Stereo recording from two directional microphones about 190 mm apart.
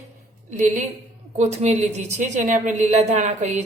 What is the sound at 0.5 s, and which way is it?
A woman's voice, 40° right (ahead or behind).